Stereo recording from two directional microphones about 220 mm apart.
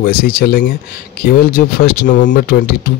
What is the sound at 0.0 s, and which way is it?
Speech, 40° left (ahead or behind).